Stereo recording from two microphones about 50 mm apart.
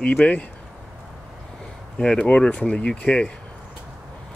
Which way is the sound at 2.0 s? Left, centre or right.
Centre.